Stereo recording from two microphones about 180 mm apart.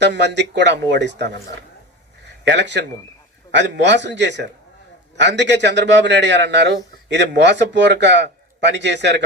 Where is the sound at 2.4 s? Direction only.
75° right (ahead or behind).